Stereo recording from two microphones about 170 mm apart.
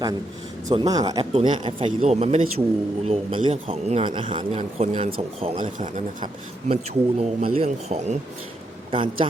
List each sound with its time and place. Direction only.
0.7 s speech: 25° right (ahead or behind)
1.2 s speech: 35° right (ahead or behind)